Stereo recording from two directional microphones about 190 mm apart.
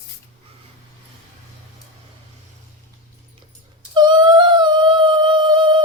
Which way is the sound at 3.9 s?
25° right (ahead or behind).